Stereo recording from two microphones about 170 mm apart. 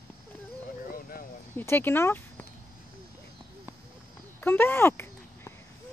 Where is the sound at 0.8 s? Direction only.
55° left (ahead or behind).